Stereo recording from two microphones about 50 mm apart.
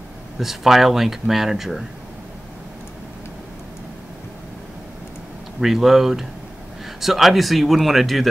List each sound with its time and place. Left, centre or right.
0.4 s speech: centre
5.6 s speech: centre